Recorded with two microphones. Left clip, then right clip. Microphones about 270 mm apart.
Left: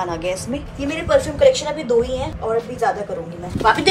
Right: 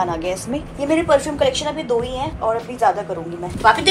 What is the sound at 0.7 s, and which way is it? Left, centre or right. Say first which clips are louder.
Speech: right 2 dB; centre.